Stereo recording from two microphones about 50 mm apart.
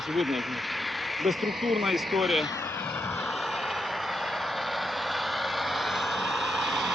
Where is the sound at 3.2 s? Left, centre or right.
Centre.